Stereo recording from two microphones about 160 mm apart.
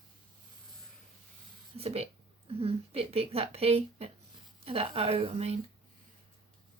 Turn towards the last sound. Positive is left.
turn(degrees=-40)  # may be behind; listen again after turning